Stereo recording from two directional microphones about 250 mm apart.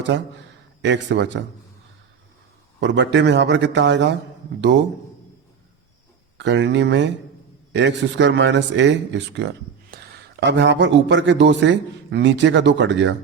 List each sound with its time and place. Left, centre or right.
0.8 s a man's voice: right
2.8 s a man's voice: right
6.3 s a man's voice: right